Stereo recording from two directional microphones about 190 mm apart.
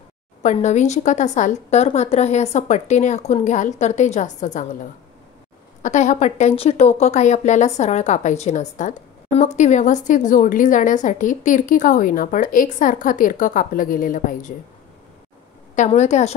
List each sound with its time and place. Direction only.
0.4 s a woman's voice: 40° left (ahead or behind)
5.8 s a woman's voice: 40° left (ahead or behind)
15.7 s a woman's voice: 40° left (ahead or behind)